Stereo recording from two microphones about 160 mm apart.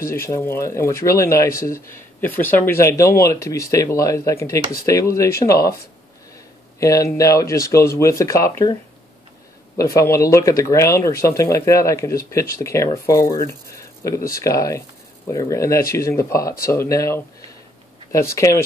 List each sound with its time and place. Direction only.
0.1 s speech: 15° left (ahead or behind)
6.8 s speech: 20° left (ahead or behind)
9.8 s speech: 20° left (ahead or behind)